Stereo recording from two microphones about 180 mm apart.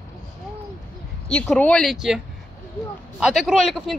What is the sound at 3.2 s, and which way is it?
Speech, centre (ahead or behind).